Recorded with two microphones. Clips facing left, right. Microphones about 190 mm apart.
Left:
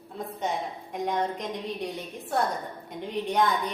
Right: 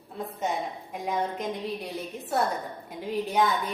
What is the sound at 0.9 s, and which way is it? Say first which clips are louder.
A woman's voice: left 1 dB; 5° right (ahead or behind).